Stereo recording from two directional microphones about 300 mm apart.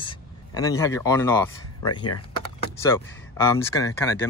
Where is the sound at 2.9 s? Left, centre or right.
Centre.